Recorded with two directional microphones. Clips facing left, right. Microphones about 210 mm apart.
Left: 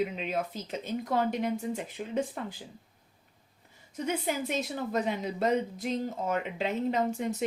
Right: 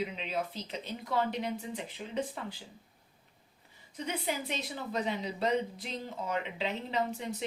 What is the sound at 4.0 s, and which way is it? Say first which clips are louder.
Speech: left 4 dB; 45° left (ahead or behind).